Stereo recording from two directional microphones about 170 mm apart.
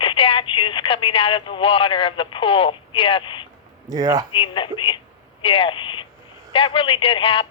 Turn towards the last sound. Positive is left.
turn(degrees=30)  # may be behind; listen again after turning